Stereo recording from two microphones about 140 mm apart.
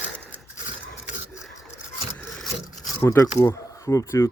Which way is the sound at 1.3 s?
5° right (ahead or behind).